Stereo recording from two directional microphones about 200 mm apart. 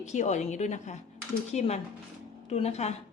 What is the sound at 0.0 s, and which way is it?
A woman's voice, 35° left (ahead or behind).